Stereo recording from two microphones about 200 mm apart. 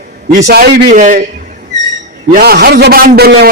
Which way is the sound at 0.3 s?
55° right (ahead or behind).